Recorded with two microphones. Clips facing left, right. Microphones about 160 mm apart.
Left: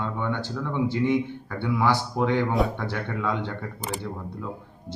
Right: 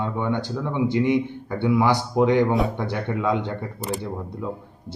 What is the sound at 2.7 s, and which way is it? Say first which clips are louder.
Speech: right 4 dB; 15° right (ahead or behind).